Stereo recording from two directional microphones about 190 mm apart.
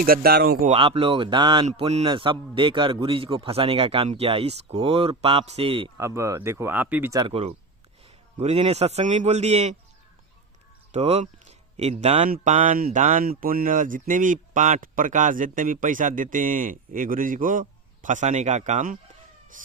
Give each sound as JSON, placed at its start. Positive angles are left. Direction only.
{"t": 0.0, "sound": "speech", "side_deg": -50}
{"t": 0.7, "sound": "a man's voice", "side_deg": -30}
{"t": 6.0, "sound": "speech", "side_deg": -15}
{"t": 7.2, "sound": "a man's voice", "side_deg": -30}
{"t": 10.9, "sound": "speech", "side_deg": -35}
{"t": 19.5, "sound": "a sound", "side_deg": -45}